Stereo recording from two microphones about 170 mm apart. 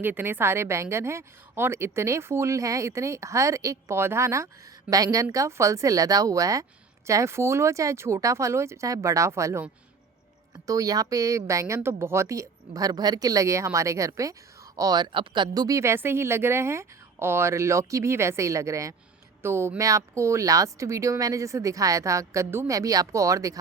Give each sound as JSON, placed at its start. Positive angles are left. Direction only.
{"t": 0.0, "sound": "a woman's voice", "side_deg": -10}
{"t": 10.7, "sound": "a woman's voice", "side_deg": -20}